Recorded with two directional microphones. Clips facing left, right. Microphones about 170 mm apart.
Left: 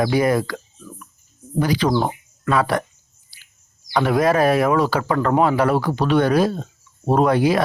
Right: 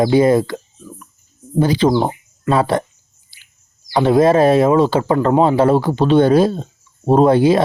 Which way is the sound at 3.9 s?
25° right (ahead or behind).